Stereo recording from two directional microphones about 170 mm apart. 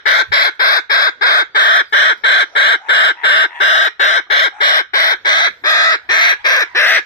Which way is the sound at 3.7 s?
40° left (ahead or behind).